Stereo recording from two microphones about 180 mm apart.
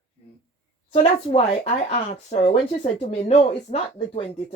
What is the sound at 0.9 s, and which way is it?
Speech, 30° left (ahead or behind).